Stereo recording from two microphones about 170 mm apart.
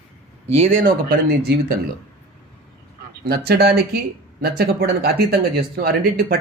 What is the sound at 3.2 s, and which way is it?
Speech, 70° right (ahead or behind).